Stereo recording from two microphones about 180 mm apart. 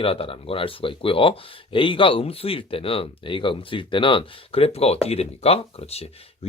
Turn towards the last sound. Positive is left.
turn(degrees=35)  # may be behind; listen again after turning